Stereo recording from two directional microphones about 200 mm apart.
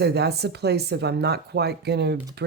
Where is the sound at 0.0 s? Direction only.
55° right (ahead or behind).